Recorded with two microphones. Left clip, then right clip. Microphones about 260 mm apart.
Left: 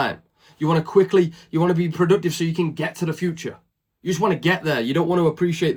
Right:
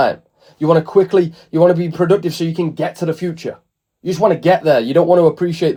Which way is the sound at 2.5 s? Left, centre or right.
Right.